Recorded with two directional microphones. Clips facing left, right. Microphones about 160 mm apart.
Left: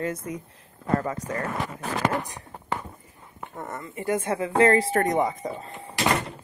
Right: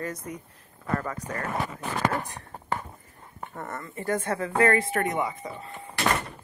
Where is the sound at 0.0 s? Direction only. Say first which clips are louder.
Left 4 dB; 25° left (ahead or behind).